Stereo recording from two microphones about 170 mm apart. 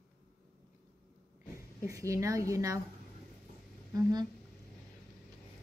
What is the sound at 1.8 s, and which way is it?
Speech, 20° right (ahead or behind).